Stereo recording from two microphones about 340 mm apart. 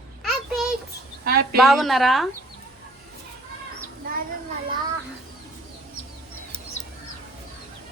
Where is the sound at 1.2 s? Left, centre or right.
Right.